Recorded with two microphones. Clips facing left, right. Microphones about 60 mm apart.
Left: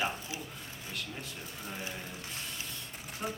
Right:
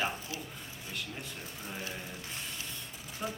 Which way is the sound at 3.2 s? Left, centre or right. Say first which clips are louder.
Even; left.